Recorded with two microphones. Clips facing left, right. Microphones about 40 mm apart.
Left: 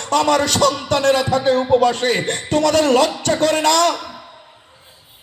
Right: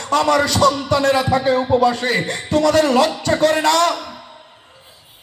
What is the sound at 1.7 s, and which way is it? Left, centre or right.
Music, left.